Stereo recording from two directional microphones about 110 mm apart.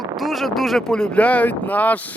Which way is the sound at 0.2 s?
Centre (ahead or behind).